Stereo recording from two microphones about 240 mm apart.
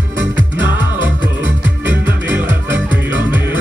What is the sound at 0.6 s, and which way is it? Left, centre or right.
Music, right.